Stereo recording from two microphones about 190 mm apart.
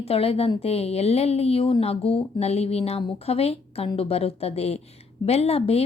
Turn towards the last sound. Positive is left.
turn(degrees=30)  # may be behind; listen again after turning